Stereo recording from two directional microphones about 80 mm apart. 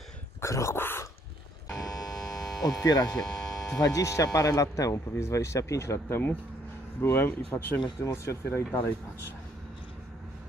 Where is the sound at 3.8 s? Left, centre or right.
Left.